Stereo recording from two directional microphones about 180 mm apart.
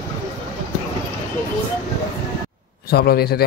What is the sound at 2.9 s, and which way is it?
Speech, 60° left (ahead or behind).